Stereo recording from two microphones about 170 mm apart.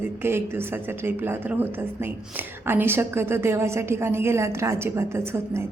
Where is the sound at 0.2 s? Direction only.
15° right (ahead or behind).